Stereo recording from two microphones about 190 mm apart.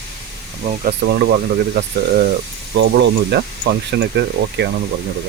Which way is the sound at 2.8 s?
65° right (ahead or behind).